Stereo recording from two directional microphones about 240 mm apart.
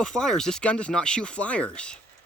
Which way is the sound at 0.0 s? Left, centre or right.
Centre.